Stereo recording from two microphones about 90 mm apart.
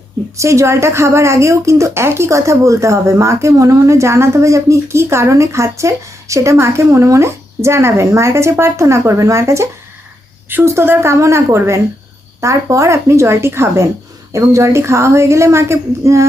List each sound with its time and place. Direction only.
0.3 s a woman's voice: 35° right (ahead or behind)